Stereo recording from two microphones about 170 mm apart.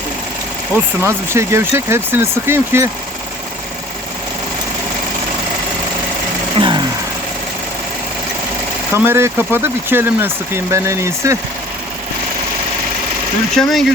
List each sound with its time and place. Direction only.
1.0 s speech: 15° right (ahead or behind)
6.6 s vehicle: 30° right (ahead or behind)
8.9 s speech: 15° right (ahead or behind)
13.6 s speech: centre (ahead or behind)